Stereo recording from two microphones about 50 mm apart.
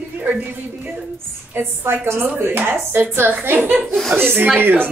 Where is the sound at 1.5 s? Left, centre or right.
Right.